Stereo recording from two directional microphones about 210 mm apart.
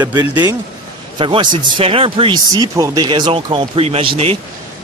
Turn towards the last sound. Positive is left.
turn(degrees=-25)  # may be behind; listen again after turning